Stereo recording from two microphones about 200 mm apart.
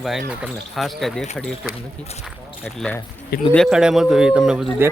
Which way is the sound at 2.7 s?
5° left (ahead or behind).